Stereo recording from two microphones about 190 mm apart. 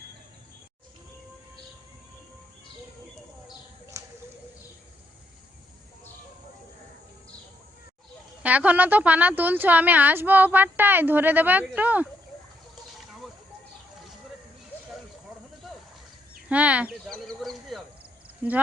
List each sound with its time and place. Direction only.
3.9 s a sound: 15° right (ahead or behind)
8.4 s a woman's voice: 10° right (ahead or behind)
15.6 s a sound: centre (ahead or behind)
16.5 s fowl: 5° right (ahead or behind)
17.1 s chicken: centre (ahead or behind)
18.4 s a woman's voice: 10° right (ahead or behind)